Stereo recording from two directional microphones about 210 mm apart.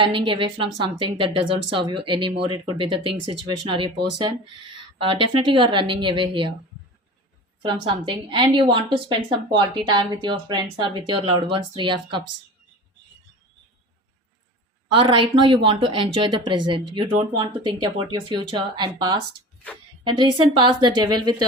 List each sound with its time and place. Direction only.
0.0 s a woman's voice: 25° right (ahead or behind)
7.6 s a woman's voice: 20° right (ahead or behind)
14.9 s a woman's voice: 25° right (ahead or behind)